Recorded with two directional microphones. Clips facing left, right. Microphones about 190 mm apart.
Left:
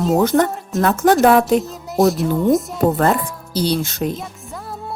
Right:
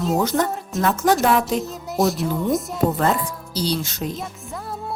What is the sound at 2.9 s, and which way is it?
Speech, 55° left (ahead or behind).